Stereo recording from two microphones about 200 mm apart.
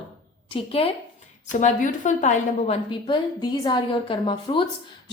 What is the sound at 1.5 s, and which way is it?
A woman's voice, 40° left (ahead or behind).